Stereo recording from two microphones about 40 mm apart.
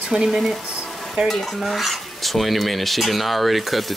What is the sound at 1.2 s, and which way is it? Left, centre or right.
Speech, centre.